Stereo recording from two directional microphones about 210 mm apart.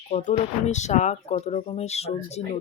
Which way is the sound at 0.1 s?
35° left (ahead or behind).